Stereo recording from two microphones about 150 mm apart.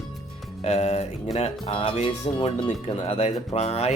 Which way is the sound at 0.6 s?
45° left (ahead or behind).